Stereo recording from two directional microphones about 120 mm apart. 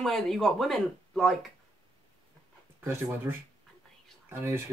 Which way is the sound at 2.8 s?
20° right (ahead or behind).